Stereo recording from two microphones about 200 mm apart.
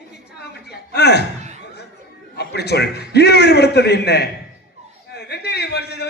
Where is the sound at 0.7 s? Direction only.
55° left (ahead or behind).